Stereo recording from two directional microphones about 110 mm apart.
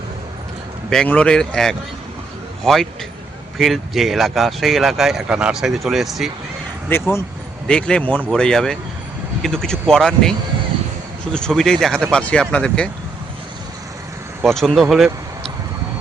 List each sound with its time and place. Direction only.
0.9 s a man's voice: 10° left (ahead or behind)
3.6 s speech: centre (ahead or behind)
6.9 s speech: 20° left (ahead or behind)
7.7 s a man's voice: 10° left (ahead or behind)
14.4 s speech: 5° left (ahead or behind)